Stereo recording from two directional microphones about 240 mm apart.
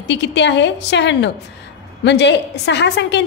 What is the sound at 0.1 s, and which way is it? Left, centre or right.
A woman's voice, left.